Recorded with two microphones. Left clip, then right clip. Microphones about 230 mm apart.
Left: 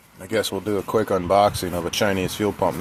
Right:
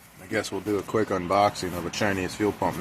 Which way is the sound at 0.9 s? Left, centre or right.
Left.